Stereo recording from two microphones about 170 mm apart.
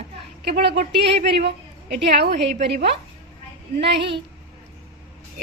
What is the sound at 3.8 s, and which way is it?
Speech, 90° right.